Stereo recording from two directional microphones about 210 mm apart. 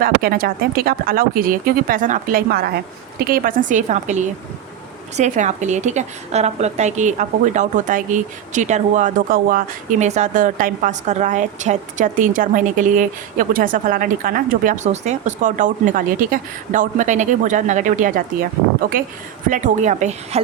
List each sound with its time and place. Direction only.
0.0 s a woman's voice: 45° right (ahead or behind)